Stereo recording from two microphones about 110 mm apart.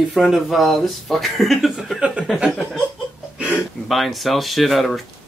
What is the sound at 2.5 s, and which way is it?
Chuckle, 5° left (ahead or behind).